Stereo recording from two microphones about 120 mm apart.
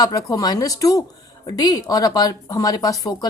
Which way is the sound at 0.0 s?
30° left (ahead or behind).